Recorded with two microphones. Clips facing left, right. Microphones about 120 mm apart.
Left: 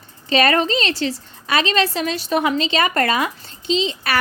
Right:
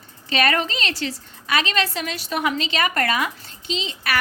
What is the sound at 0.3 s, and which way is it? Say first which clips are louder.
A woman's voice: left 5 dB; 30° left (ahead or behind).